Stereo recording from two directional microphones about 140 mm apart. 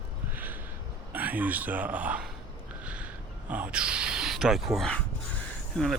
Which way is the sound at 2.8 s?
10° right (ahead or behind).